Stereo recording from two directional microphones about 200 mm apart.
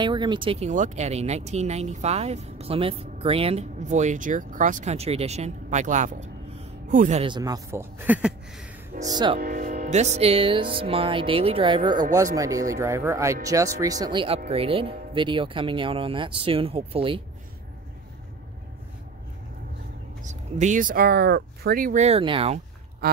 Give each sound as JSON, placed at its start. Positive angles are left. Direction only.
{"t": 0.0, "sound": "speech", "side_deg": -25}
{"t": 7.2, "sound": "speech", "side_deg": -20}
{"t": 9.0, "sound": "speech", "side_deg": -20}
{"t": 9.4, "sound": "speech", "side_deg": -45}
{"t": 20.2, "sound": "speech", "side_deg": -35}